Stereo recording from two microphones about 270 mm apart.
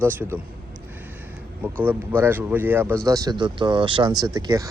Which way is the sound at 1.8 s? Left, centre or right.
Centre.